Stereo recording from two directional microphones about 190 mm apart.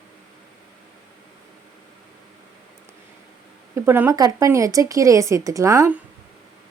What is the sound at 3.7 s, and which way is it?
Speech, 10° right (ahead or behind).